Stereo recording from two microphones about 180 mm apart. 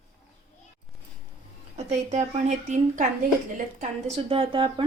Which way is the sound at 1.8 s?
40° right (ahead or behind).